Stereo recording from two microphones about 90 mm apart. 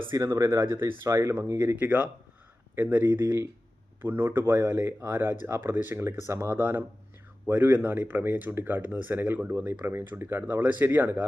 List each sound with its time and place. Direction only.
0.1 s speech: 35° right (ahead or behind); by 11.3 s 20° right (ahead or behind)